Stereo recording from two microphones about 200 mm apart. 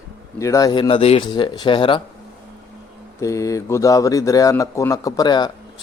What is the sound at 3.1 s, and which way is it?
Speech, 15° left (ahead or behind).